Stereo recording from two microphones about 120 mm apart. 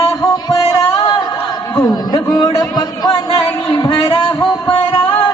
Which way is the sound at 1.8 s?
35° left (ahead or behind).